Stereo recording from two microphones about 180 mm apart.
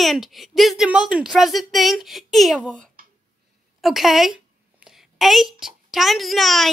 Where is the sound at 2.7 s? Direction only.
50° right (ahead or behind).